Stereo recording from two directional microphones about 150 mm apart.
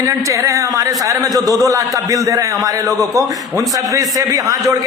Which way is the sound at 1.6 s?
20° right (ahead or behind).